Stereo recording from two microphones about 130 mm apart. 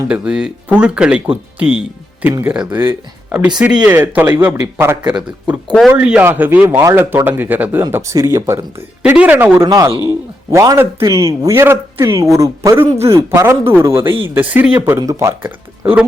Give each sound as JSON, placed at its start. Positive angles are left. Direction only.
{"t": 0.1, "sound": "a man's voice", "side_deg": -5}
{"t": 9.0, "sound": "speech", "side_deg": -10}
{"t": 9.6, "sound": "a man's voice", "side_deg": -30}
{"t": 14.9, "sound": "a man's voice", "side_deg": -25}